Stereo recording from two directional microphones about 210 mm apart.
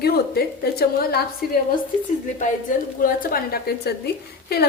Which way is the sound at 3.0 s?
45° left (ahead or behind).